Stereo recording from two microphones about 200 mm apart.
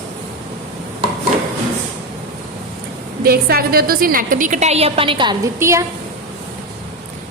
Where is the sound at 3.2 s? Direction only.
50° right (ahead or behind); by 5.8 s 15° right (ahead or behind).